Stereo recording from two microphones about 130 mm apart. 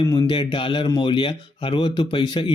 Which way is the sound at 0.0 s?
30° left (ahead or behind).